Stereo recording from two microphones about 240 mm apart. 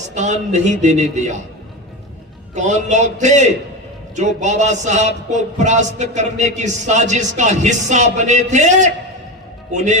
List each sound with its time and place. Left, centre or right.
0.1 s a man's voice: right
2.6 s a man's voice: right